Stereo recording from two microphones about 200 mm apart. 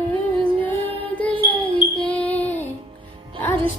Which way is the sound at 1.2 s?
10° left (ahead or behind).